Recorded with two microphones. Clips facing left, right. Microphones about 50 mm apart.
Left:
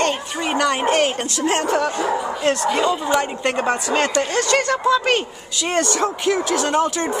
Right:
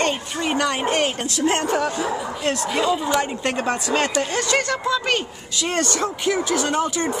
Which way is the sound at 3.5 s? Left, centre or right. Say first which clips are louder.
Left 2 dB; centre.